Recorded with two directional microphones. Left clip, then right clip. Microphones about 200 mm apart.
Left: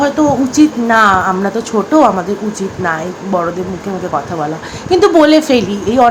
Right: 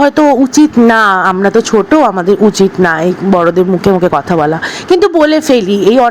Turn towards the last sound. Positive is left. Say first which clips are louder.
# right 4 dB
turn(degrees=-40)  # may be behind; listen again after turning